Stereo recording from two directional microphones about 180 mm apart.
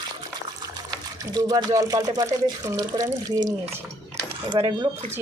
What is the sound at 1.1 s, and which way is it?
Speech, 20° right (ahead or behind).